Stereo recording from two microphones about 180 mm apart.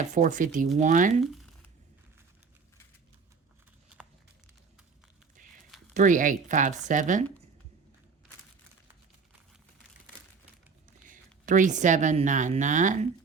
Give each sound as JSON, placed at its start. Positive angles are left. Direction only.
{"t": 0.0, "sound": "speech", "side_deg": -45}
{"t": 1.2, "sound": "speech", "side_deg": 0}
{"t": 5.4, "sound": "a sound", "side_deg": -45}
{"t": 5.9, "sound": "speech", "side_deg": -45}
{"t": 11.1, "sound": "speech", "side_deg": -45}